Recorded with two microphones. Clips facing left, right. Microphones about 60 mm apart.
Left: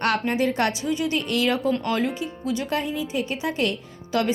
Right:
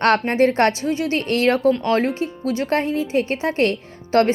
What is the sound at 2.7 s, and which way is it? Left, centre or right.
Speech, right.